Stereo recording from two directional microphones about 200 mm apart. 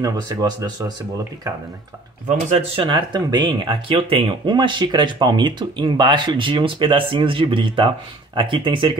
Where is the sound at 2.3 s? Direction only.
30° right (ahead or behind).